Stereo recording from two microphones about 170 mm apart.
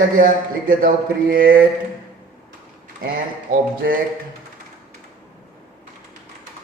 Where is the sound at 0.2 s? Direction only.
55° right (ahead or behind).